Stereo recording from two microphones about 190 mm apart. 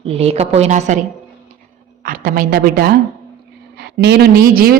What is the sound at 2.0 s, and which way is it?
A woman's voice, 45° right (ahead or behind).